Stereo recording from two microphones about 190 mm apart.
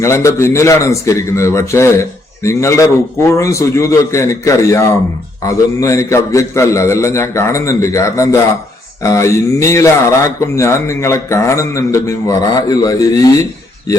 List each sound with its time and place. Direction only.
0.0 s a man's voice: 15° left (ahead or behind)